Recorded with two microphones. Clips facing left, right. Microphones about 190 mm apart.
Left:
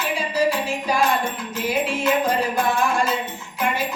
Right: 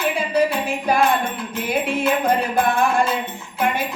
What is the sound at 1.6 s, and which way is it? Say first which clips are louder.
Music: right 1 dB; 55° right (ahead or behind).